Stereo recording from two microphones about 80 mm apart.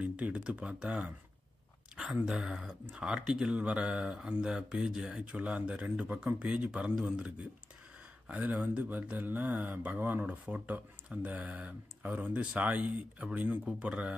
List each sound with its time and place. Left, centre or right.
0.0 s speech: centre
2.2 s speech: centre